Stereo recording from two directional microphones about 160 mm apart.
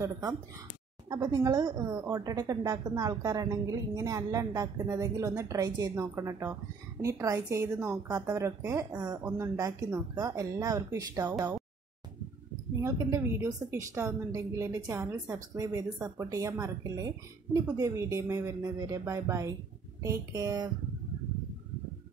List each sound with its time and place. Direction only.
0.0 s speech: 20° right (ahead or behind)
12.8 s speech: 15° right (ahead or behind)